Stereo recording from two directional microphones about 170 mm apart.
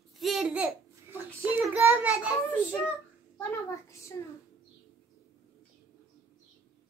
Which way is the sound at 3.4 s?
15° left (ahead or behind).